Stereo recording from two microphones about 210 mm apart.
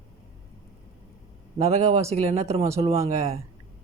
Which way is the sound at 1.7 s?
30° right (ahead or behind).